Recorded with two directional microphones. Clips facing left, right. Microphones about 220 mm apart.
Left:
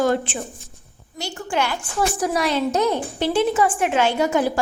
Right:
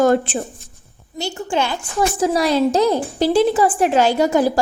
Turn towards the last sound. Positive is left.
turn(degrees=-35)  # may be behind; listen again after turning